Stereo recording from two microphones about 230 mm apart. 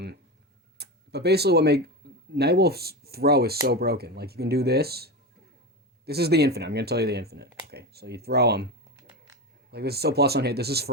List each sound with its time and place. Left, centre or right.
0.8 s speech: right
9.7 s speech: right